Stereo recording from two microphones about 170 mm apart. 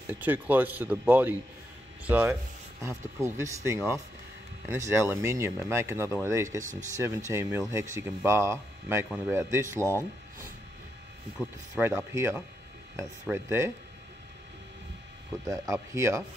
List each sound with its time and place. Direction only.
0.0 s speech: 10° right (ahead or behind)
6.6 s speech: 50° right (ahead or behind)
7.2 s speech: 15° right (ahead or behind)
11.3 s speech: 10° right (ahead or behind)
15.7 s speech: 15° right (ahead or behind)